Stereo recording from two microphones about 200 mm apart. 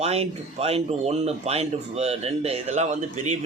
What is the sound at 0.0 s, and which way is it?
Speech, 30° right (ahead or behind).